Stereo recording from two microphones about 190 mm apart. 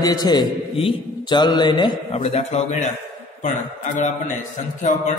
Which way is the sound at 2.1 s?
35° left (ahead or behind).